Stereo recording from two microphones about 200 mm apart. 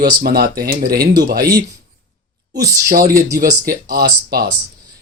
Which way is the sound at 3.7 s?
50° right (ahead or behind).